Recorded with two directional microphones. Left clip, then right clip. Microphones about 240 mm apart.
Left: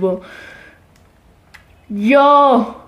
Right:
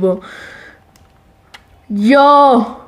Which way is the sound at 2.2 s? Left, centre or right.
Right.